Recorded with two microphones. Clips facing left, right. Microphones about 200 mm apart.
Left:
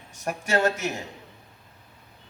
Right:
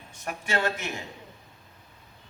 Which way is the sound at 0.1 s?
40° left (ahead or behind).